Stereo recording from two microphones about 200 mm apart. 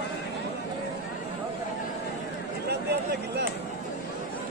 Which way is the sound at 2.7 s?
55° right (ahead or behind).